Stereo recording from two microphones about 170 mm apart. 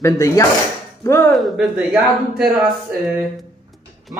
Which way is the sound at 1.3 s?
Centre (ahead or behind).